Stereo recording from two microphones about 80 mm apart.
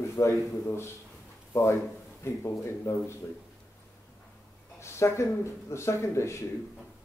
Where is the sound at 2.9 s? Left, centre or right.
Left.